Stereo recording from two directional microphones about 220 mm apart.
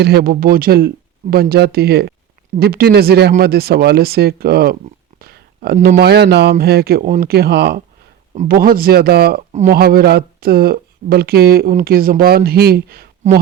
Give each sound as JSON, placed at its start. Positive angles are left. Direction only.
{"t": 0.0, "sound": "speech", "side_deg": -45}
{"t": 5.2, "sound": "a sound", "side_deg": -45}
{"t": 5.7, "sound": "speech", "side_deg": -40}
{"t": 9.5, "sound": "speech", "side_deg": -30}
{"t": 9.7, "sound": "speech", "side_deg": -45}